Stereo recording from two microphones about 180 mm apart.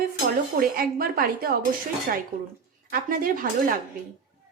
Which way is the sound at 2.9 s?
55° right (ahead or behind).